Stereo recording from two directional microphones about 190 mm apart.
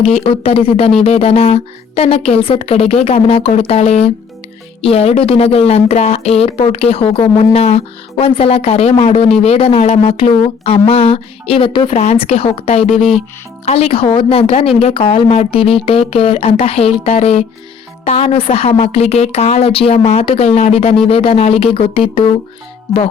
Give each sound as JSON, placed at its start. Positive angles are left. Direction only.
{"t": 0.2, "sound": "speech", "side_deg": 30}